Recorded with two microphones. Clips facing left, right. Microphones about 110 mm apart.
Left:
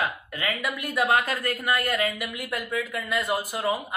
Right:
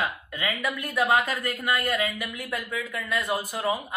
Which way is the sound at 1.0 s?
5° right (ahead or behind).